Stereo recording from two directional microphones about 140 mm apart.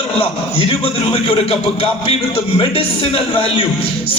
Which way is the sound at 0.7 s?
45° left (ahead or behind).